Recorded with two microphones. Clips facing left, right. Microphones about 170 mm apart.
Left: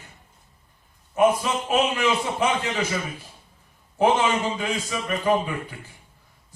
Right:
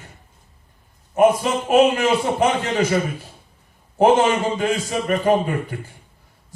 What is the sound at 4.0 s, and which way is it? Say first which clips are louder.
A man's voice: right 5 dB; 45° right (ahead or behind).